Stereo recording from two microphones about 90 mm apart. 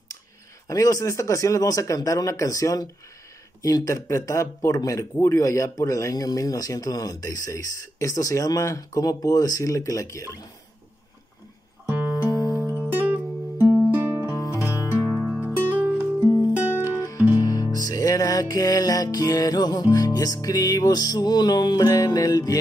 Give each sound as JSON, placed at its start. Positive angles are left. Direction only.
{"t": 0.7, "sound": "speech", "side_deg": 40}
{"t": 11.8, "sound": "music", "side_deg": -25}
{"t": 14.3, "sound": "music", "side_deg": 35}
{"t": 14.8, "sound": "music", "side_deg": -30}
{"t": 17.4, "sound": "music", "side_deg": 45}
{"t": 21.8, "sound": "speech", "side_deg": 40}